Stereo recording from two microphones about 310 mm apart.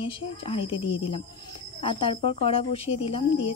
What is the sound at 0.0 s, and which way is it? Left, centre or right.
A woman's voice, centre.